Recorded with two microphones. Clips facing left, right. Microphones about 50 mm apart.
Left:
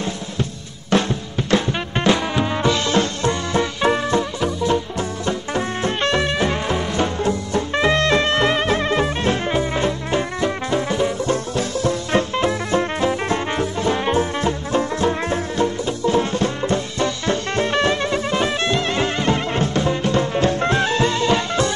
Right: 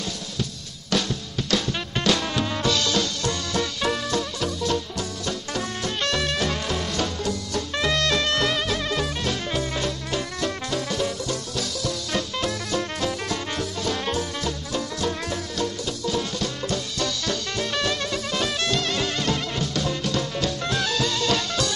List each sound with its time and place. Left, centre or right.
0.0 s drum kit: left